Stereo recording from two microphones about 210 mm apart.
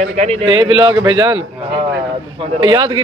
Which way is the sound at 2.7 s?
20° right (ahead or behind).